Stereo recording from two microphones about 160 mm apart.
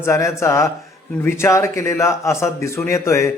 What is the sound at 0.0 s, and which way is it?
A man's voice, 20° left (ahead or behind).